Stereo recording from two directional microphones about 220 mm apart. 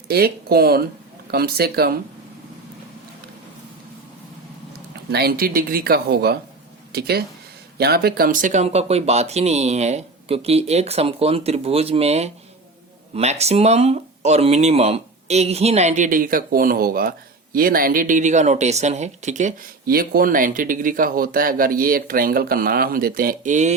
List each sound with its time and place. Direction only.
0.1 s speech: 45° right (ahead or behind)
5.1 s speech: 45° right (ahead or behind)